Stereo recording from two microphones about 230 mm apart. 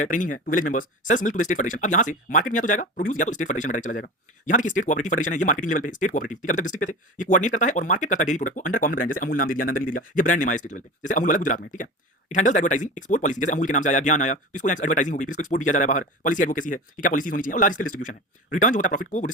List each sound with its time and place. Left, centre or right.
0.0 s speech: left